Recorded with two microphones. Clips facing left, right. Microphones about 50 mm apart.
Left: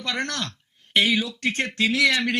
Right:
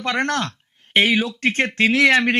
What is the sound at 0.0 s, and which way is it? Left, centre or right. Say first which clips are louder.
Speech: right 7 dB; right.